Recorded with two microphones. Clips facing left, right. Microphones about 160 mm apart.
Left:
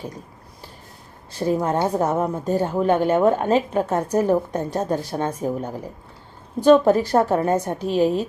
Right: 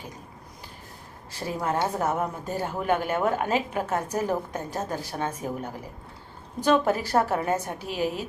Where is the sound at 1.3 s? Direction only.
35° left (ahead or behind).